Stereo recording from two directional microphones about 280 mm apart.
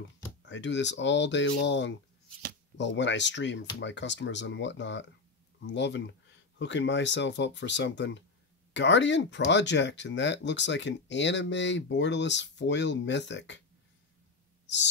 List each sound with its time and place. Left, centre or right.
0.5 s speech: left